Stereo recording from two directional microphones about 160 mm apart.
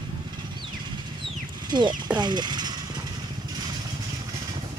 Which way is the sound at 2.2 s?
25° right (ahead or behind).